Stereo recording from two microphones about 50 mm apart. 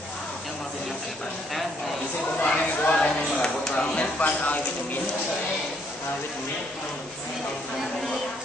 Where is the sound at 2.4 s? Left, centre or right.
Left.